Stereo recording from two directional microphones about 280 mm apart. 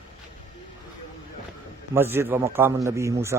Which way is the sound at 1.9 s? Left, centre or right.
Centre.